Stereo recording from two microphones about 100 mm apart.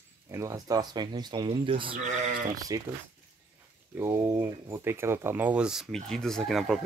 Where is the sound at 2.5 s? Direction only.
35° right (ahead or behind).